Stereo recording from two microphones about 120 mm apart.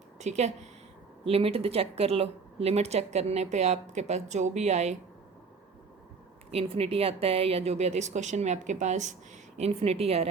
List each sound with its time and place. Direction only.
0.2 s speech: 70° right (ahead or behind)
1.2 s speech: 55° right (ahead or behind); by 4.9 s 70° right (ahead or behind)
6.5 s speech: 55° right (ahead or behind); by 9.1 s 80° right
9.6 s speech: 60° right (ahead or behind)